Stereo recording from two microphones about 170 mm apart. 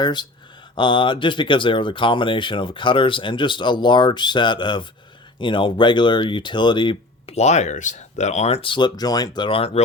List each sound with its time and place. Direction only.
0.0 s speech: 25° left (ahead or behind)